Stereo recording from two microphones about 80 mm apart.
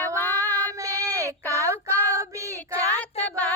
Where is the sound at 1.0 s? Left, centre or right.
Right.